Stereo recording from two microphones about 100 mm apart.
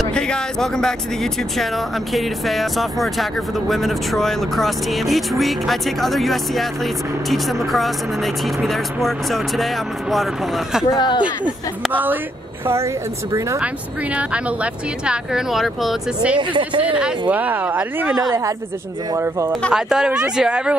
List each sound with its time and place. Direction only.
0.0 s speech: 5° left (ahead or behind)
11.0 s speech: 50° left (ahead or behind)
11.9 s speech: 20° right (ahead or behind)
12.6 s speech: 30° right (ahead or behind)
14.1 s speech: 10° right (ahead or behind)
16.3 s speech: 55° right (ahead or behind)
16.8 s speech: 15° right (ahead or behind)
19.1 s speech: 25° right (ahead or behind)
19.7 s speech: 5° right (ahead or behind)